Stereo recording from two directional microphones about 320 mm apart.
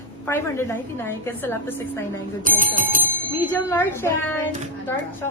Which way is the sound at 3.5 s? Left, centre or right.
Centre.